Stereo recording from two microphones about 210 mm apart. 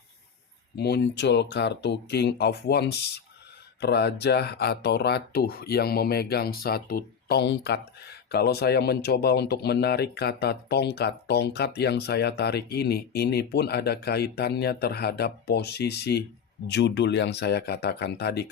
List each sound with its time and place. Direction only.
0.8 s speech: 50° left (ahead or behind)